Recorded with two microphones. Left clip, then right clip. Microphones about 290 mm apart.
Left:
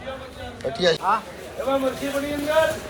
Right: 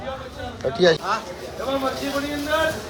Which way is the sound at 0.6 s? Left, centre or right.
Right.